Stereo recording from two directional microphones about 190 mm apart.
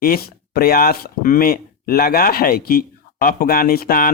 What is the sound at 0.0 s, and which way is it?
Speech, 50° left (ahead or behind).